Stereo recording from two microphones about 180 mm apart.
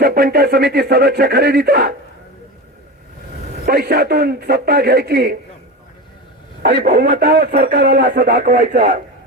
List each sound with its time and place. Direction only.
0.0 s speech: 55° right (ahead or behind)
3.7 s speech: 55° right (ahead or behind)
6.6 s speech: 55° right (ahead or behind)